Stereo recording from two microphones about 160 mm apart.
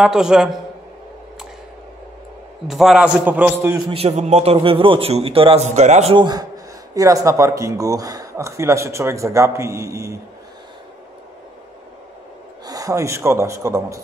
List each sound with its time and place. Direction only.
0.0 s a man's voice: 5° right (ahead or behind)
2.7 s a man's voice: centre (ahead or behind)
3.9 s a man's voice: 40° right (ahead or behind)
5.7 s a man's voice: 45° right (ahead or behind)
6.1 s a man's voice: 25° right (ahead or behind)
12.6 s a man's voice: 20° right (ahead or behind)